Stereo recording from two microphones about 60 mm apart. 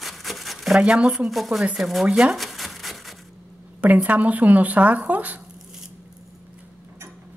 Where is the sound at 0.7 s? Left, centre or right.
Centre.